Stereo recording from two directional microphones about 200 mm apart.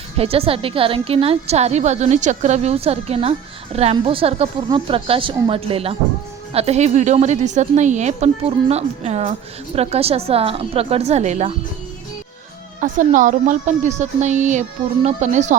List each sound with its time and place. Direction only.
0.2 s a woman's voice: 30° right (ahead or behind)
12.8 s a woman's voice: 40° right (ahead or behind)